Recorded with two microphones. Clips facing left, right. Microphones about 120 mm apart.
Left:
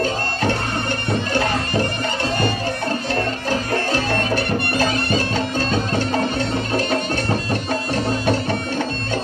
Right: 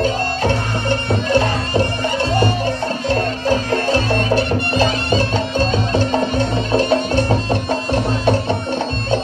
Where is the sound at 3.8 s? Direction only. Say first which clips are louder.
Right 3 dB; 25° right (ahead or behind).